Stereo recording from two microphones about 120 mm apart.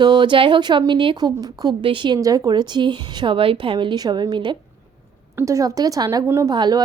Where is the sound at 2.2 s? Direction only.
30° right (ahead or behind).